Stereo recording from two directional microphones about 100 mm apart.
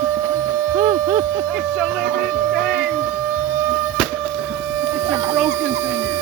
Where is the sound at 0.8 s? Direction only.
40° right (ahead or behind).